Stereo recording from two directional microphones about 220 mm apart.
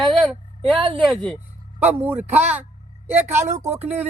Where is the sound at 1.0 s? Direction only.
Centre (ahead or behind).